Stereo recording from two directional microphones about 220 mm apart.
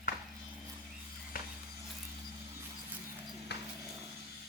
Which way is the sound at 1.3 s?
40° left (ahead or behind).